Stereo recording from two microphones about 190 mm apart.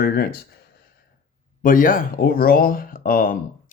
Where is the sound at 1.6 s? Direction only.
45° left (ahead or behind).